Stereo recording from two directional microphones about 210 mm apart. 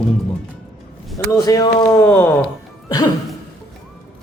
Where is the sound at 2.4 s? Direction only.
20° left (ahead or behind).